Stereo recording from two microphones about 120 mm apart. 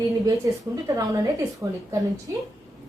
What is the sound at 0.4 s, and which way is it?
A woman's voice, 25° right (ahead or behind).